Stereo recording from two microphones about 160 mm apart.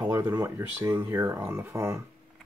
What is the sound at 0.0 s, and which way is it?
Speech, 15° right (ahead or behind).